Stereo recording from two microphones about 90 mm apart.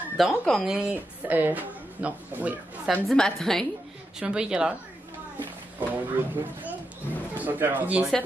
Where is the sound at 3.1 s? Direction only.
5° left (ahead or behind).